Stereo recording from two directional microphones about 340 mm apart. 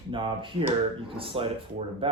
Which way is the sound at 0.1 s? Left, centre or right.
Centre.